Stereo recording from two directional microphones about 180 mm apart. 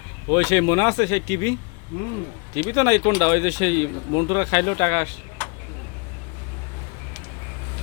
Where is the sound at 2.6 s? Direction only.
20° left (ahead or behind).